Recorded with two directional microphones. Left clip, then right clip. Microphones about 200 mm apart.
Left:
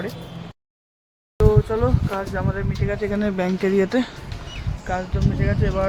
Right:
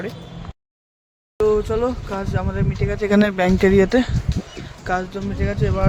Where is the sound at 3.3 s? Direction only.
25° right (ahead or behind).